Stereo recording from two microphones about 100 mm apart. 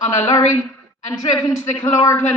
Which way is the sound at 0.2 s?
35° left (ahead or behind).